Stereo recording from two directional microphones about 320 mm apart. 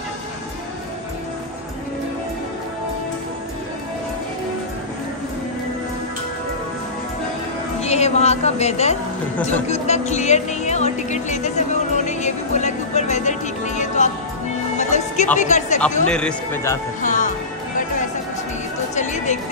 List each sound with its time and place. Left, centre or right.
7.8 s a woman's voice: centre
16.1 s speech: centre
17.0 s music: left
18.9 s music: left